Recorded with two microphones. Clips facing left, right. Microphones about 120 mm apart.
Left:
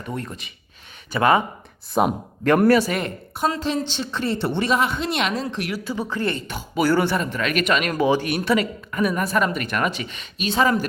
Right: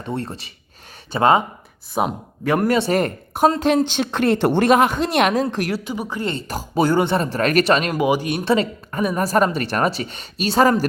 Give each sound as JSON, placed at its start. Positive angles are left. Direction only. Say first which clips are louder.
{"t": 0.0, "sound": "a woman's voice", "louder": "right 4 dB", "side_deg": -30}
{"t": 1.9, "sound": "speech", "louder": "left 2 dB", "side_deg": -5}
{"t": 2.6, "sound": "speech", "louder": "left 3 dB", "side_deg": -25}
{"t": 2.9, "sound": "speech", "louder": "right 6 dB", "side_deg": -45}
{"t": 3.8, "sound": "speech", "louder": "right 7 dB", "side_deg": -60}
{"t": 5.8, "sound": "a woman's voice", "louder": "even", "side_deg": -15}
{"t": 6.3, "sound": "a woman's voice", "louder": "right 4 dB", "side_deg": -35}
{"t": 6.8, "sound": "speech", "louder": "right 1 dB", "side_deg": -20}
{"t": 7.2, "sound": "a woman's voice", "louder": "right 5 dB", "side_deg": -40}
{"t": 7.9, "sound": "a woman's voice", "louder": "right 1 dB", "side_deg": -15}
{"t": 8.4, "sound": "a woman's voice", "louder": "right 5 dB", "side_deg": -30}